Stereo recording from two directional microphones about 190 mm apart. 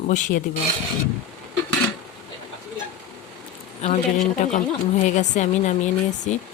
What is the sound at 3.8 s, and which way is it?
Speech, 40° left (ahead or behind).